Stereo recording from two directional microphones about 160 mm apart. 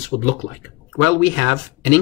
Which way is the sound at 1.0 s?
10° left (ahead or behind).